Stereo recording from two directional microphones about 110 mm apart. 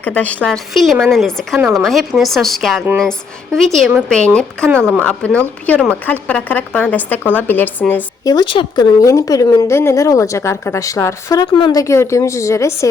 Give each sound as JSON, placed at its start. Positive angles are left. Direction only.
{"t": 0.0, "sound": "a woman's voice", "side_deg": 15}
{"t": 8.2, "sound": "speech", "side_deg": 35}
{"t": 8.4, "sound": "speech", "side_deg": 50}
{"t": 9.0, "sound": "a woman's voice", "side_deg": 30}
{"t": 11.5, "sound": "speech", "side_deg": 45}
{"t": 11.8, "sound": "a woman's voice", "side_deg": 25}